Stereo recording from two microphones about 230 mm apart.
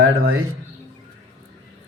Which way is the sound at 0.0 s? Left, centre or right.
Right.